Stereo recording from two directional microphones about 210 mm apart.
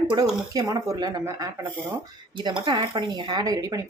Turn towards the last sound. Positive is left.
turn(degrees=-15)  # may be behind; listen again after turning